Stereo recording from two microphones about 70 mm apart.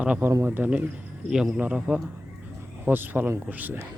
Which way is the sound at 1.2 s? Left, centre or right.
Centre.